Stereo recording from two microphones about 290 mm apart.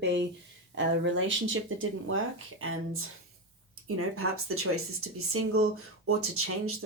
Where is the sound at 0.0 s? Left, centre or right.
Right.